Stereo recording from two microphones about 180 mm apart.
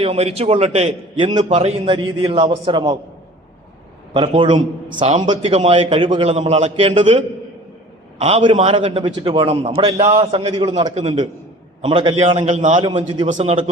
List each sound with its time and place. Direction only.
0.0 s a man's voice: 35° right (ahead or behind)
4.1 s a man's voice: 30° right (ahead or behind)
10.8 s a man's voice: 40° right (ahead or behind)
11.8 s a man's voice: 30° right (ahead or behind)
12.5 s a man's voice: 45° right (ahead or behind)
12.8 s a man's voice: 25° right (ahead or behind)
13.2 s a man's voice: 40° right (ahead or behind)